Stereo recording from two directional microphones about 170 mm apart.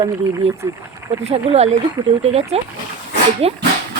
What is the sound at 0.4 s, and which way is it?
Speech, 35° right (ahead or behind).